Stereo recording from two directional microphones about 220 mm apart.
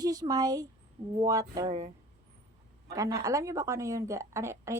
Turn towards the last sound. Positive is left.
turn(degrees=-15)  # may be behind; listen again after turning